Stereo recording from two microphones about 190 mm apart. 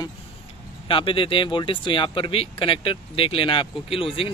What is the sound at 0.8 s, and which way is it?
Speech, 30° left (ahead or behind).